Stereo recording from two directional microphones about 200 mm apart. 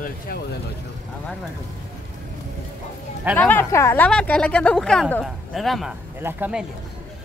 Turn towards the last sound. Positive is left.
turn(degrees=-10)  # may be behind; listen again after turning